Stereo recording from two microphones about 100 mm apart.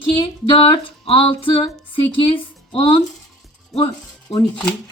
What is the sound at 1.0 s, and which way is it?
Speech, 65° left (ahead or behind).